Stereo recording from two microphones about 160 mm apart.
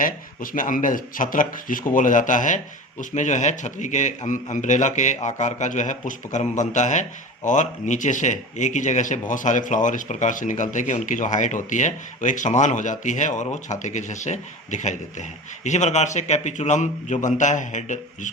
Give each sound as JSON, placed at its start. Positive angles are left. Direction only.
{"t": 0.0, "sound": "speech", "side_deg": 55}